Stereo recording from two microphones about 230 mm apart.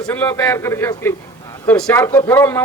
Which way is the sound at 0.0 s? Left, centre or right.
Centre.